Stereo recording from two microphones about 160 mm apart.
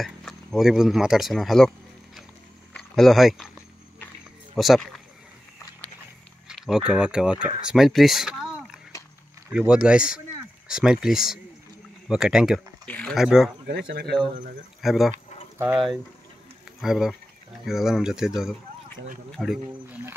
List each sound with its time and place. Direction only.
0.0 s speech: centre (ahead or behind)
2.7 s a sound: 5° left (ahead or behind)
4.6 s speech: centre (ahead or behind)
6.5 s speech: centre (ahead or behind)
12.8 s a sound: 10° left (ahead or behind)
13.1 s speech: centre (ahead or behind)
13.7 s speech: 90° right
14.8 s speech: centre (ahead or behind)
15.5 s speech: 15° right (ahead or behind)
16.8 s speech: centre (ahead or behind)